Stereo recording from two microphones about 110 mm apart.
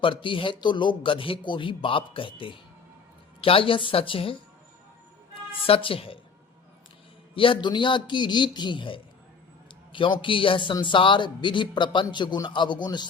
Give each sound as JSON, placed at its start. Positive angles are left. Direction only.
{"t": 0.0, "sound": "a man's voice", "side_deg": 50}
{"t": 5.6, "sound": "speech", "side_deg": 55}
{"t": 7.3, "sound": "a man's voice", "side_deg": 50}